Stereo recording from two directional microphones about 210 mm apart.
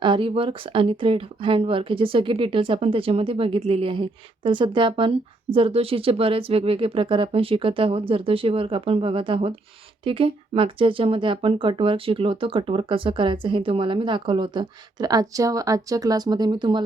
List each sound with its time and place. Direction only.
0.0 s speech: 25° right (ahead or behind)